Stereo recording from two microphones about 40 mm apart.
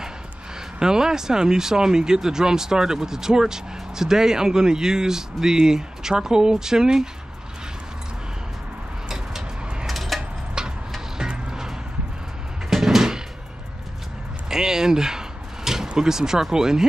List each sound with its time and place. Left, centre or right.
0.7 s speech: centre
9.1 s a sound: centre
10.6 s vehicle: centre
12.6 s vehicle: centre
14.5 s a sound: centre
16.0 s speech: centre